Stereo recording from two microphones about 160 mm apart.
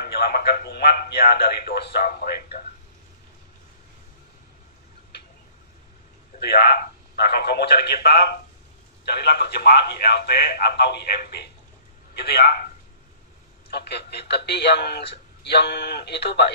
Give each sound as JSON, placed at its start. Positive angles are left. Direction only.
{"t": 0.0, "sound": "a man's voice", "side_deg": 85}
{"t": 6.4, "sound": "a man's voice", "side_deg": 80}
{"t": 9.0, "sound": "a man's voice", "side_deg": 90}